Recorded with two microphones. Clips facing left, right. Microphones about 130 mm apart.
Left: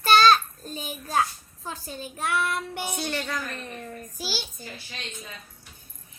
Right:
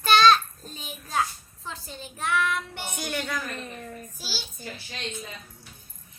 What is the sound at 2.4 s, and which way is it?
Child singing, 40° left (ahead or behind).